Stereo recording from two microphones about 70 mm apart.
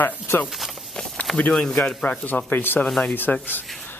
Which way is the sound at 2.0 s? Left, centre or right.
Left.